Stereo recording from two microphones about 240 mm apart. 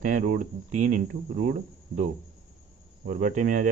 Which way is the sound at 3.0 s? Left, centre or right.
Right.